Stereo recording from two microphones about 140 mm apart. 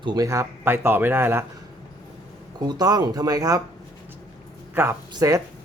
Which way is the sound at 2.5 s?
30° right (ahead or behind).